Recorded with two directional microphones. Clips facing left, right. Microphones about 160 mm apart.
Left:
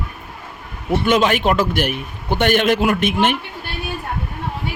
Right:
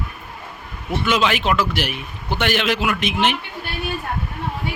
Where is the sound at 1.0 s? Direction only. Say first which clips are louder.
Left 3 dB; 50° left (ahead or behind).